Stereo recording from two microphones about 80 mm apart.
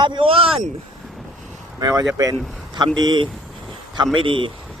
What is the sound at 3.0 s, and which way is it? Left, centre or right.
Speech, right.